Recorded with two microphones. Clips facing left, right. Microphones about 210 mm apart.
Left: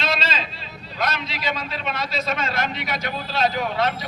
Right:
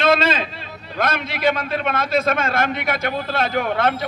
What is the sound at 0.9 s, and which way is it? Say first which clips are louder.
A man's voice: right 4 dB; 50° right (ahead or behind).